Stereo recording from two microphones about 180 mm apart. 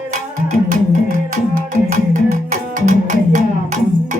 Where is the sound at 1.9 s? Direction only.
45° right (ahead or behind).